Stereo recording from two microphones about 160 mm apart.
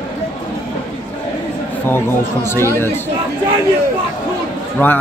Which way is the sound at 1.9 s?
15° left (ahead or behind).